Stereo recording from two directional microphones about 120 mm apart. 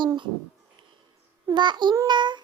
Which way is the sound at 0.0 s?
40° right (ahead or behind).